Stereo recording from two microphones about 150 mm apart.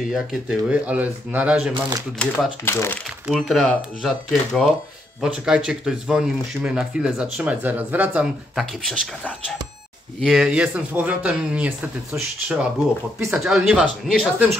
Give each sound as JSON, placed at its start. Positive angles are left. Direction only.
{"t": 0.0, "sound": "speech", "side_deg": 0}
{"t": 1.7, "sound": "speech", "side_deg": -30}
{"t": 2.6, "sound": "speech", "side_deg": 15}
{"t": 3.3, "sound": "speech", "side_deg": 0}